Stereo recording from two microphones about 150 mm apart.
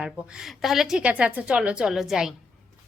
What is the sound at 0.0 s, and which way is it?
A woman's voice, 5° right (ahead or behind).